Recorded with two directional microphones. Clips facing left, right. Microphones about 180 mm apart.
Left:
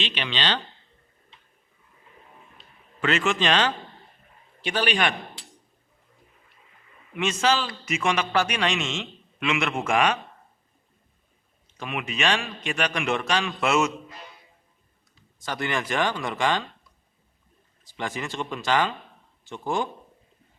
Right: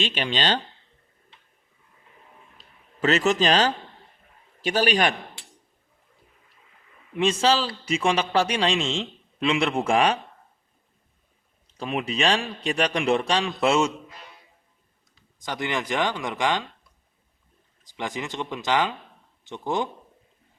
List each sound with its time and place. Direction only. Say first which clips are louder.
0.0 s speech: right 3 dB; 45° right (ahead or behind)
2.6 s a man's voice: right 3 dB; 40° right (ahead or behind)
7.1 s a man's voice: right 3 dB; 30° right (ahead or behind)
11.8 s a man's voice: right 3 dB; 35° right (ahead or behind)
15.4 s speech: even; 20° right (ahead or behind)
17.8 s speech: even; 15° right (ahead or behind)